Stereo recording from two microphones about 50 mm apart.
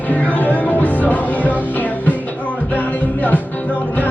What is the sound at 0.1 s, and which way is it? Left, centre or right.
Music, left.